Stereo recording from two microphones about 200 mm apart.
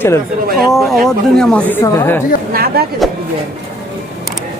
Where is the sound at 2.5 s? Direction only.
50° right (ahead or behind).